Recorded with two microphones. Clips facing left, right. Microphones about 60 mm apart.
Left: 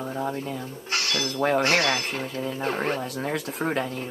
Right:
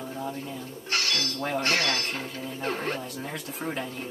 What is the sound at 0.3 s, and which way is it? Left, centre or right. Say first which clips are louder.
Speech: left 5 dB; left.